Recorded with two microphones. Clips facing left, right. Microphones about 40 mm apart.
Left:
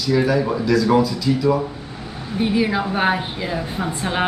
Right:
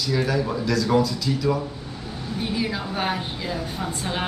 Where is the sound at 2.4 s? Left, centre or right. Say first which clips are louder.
Left 8 dB; left.